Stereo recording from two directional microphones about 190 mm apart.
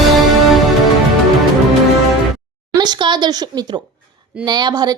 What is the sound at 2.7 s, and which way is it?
A woman's voice, 20° right (ahead or behind).